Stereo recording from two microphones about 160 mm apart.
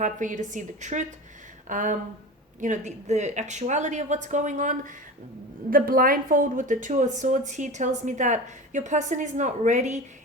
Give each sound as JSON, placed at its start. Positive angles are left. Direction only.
{"t": 0.0, "sound": "a woman's voice", "side_deg": -50}
{"t": 5.7, "sound": "a woman's voice", "side_deg": -60}